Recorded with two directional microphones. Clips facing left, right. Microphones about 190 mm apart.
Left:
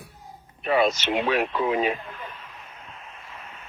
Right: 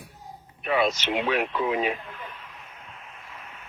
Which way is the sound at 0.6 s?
40° left (ahead or behind).